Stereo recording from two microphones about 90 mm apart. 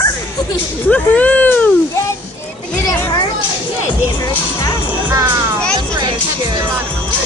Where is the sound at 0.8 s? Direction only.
15° left (ahead or behind).